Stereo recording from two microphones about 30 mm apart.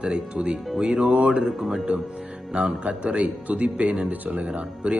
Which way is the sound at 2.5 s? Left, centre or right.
Right.